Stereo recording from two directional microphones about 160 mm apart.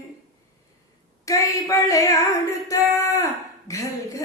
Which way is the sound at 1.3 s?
20° left (ahead or behind).